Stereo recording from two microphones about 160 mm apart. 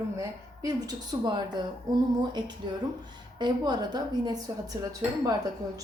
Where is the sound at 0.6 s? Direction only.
25° right (ahead or behind).